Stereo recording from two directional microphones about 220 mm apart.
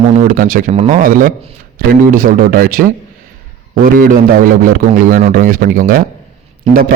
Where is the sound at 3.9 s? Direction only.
40° right (ahead or behind).